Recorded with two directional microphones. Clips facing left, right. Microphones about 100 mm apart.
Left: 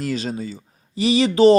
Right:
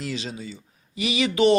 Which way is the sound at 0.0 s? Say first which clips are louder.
Left 6 dB; 45° left (ahead or behind).